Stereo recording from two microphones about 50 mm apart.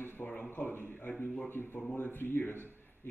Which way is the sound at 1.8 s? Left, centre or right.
Left.